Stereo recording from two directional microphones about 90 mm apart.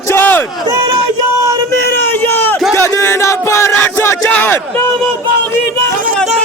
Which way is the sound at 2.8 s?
35° left (ahead or behind).